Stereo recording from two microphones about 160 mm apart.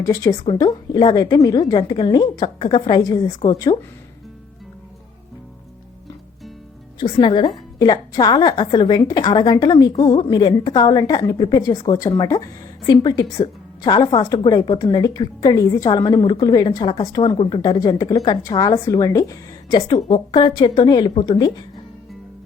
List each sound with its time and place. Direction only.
0.0 s a woman's voice: 20° left (ahead or behind)
7.0 s a woman's voice: 30° left (ahead or behind)
20.0 s a woman's voice: 40° left (ahead or behind)